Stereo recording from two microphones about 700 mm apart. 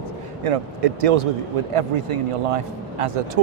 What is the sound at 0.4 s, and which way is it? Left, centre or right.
Speech, right.